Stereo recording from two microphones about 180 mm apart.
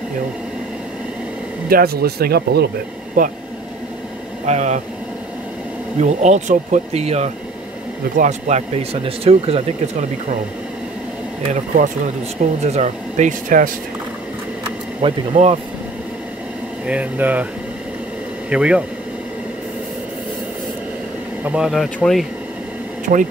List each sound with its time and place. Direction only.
1.7 s speech: 60° right (ahead or behind)
3.2 s speech: 50° right (ahead or behind)
4.5 s speech: 40° right (ahead or behind)
5.9 s speech: 40° right (ahead or behind)
11.7 s speech: 45° right (ahead or behind)
15.0 s speech: 35° right (ahead or behind)
16.8 s speech: 5° right (ahead or behind)
18.5 s speech: 5° right (ahead or behind)
21.5 s speech: 5° right (ahead or behind)